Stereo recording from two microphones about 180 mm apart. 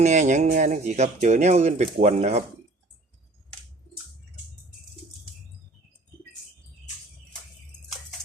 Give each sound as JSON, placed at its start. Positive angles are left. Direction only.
{"t": 0.0, "sound": "speech", "side_deg": -40}